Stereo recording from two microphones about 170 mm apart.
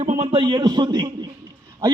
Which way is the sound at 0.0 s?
35° right (ahead or behind).